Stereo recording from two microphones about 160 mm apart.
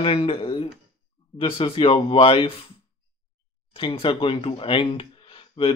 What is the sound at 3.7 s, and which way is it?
Speech, 30° left (ahead or behind).